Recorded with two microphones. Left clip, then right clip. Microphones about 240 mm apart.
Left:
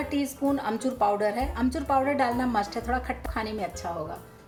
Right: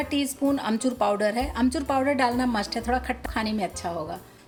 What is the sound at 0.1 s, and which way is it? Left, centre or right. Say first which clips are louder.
A woman's voice: right 2 dB; right.